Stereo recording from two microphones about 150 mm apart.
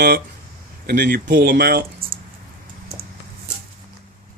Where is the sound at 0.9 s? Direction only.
70° right (ahead or behind); by 1.8 s 90° right.